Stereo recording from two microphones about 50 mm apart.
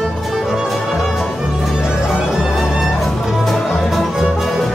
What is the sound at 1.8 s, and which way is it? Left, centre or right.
Music, centre.